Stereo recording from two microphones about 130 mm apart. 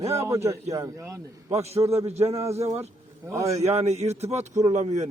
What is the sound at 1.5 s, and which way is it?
Speech, 55° right (ahead or behind).